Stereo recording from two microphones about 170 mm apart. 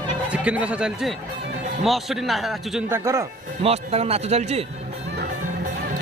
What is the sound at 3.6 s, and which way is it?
Speech, 35° right (ahead or behind).